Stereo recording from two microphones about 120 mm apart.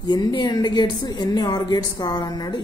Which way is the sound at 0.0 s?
35° left (ahead or behind).